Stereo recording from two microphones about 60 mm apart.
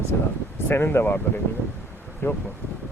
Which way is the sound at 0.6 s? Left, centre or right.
Left.